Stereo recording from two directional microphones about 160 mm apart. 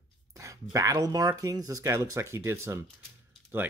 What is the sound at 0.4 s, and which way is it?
Speech, 20° right (ahead or behind).